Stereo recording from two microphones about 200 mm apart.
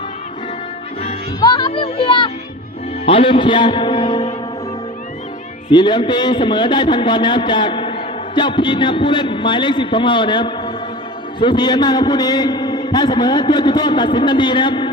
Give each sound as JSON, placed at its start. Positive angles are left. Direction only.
{"t": 1.0, "sound": "music", "side_deg": 25}
{"t": 3.1, "sound": "a man's voice", "side_deg": 25}
{"t": 5.7, "sound": "a man's voice", "side_deg": 20}